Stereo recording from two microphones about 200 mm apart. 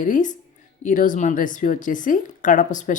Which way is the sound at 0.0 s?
40° left (ahead or behind).